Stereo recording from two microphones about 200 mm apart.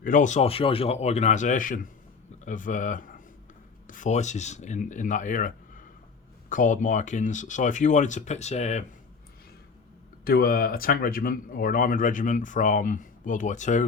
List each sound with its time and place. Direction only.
0.0 s speech: 40° left (ahead or behind)
10.2 s speech: 45° left (ahead or behind)